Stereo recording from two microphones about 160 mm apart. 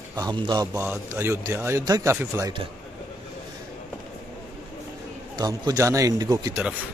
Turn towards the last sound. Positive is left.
turn(degrees=-25)  # may be behind; listen again after turning